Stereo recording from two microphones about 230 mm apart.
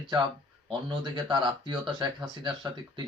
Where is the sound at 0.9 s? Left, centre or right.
Right.